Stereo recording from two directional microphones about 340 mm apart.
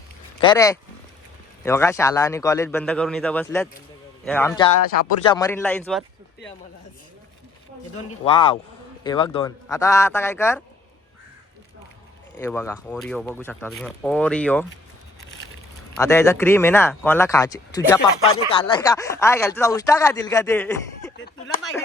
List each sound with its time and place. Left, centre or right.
0.4 s speech: centre
8.2 s speech: centre
12.4 s speech: centre
16.0 s speech: centre
21.2 s a sound: left